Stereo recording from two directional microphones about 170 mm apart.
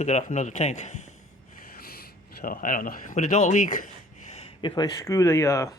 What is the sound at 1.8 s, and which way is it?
Speech, 60° left (ahead or behind).